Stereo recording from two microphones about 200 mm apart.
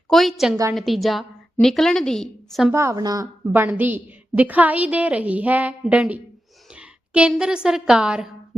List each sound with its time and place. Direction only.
0.1 s a woman's voice: centre (ahead or behind)
2.7 s a woman's voice: 15° right (ahead or behind)